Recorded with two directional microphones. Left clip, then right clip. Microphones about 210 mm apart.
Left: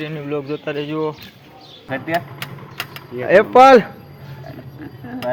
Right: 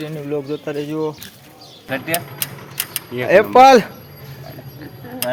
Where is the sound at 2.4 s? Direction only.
35° right (ahead or behind).